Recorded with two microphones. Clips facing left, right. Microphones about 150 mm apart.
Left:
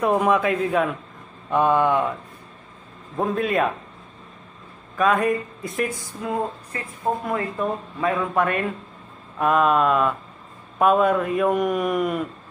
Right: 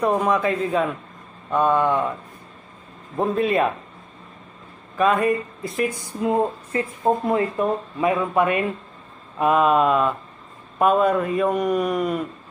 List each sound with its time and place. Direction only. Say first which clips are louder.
0.0 s speech: left 1 dB; 5° left (ahead or behind)
3.2 s speech: right 2 dB; centre (ahead or behind)
4.9 s speech: right 1 dB; centre (ahead or behind)
6.2 s a woman's voice: right 5 dB; 25° right (ahead or behind); by 12.3 s centre (ahead or behind)